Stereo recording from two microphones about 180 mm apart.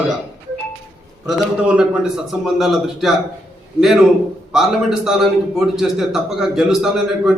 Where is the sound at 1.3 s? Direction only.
Centre (ahead or behind).